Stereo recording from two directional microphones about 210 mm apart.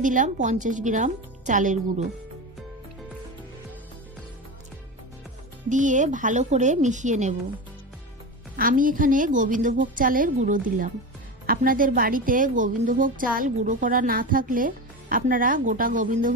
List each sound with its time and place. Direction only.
0.0 s a woman's voice: 40° right (ahead or behind)
5.7 s a woman's voice: 35° right (ahead or behind)
8.5 s a woman's voice: 40° right (ahead or behind)